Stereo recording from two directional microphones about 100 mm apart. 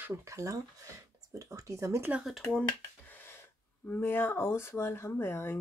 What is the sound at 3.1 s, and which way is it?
Speech, 20° left (ahead or behind).